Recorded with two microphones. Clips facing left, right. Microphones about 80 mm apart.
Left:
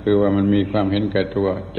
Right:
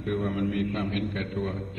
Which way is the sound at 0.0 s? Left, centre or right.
Left.